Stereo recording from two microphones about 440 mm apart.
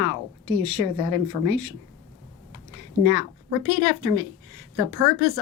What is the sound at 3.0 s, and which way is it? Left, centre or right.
Speech, left.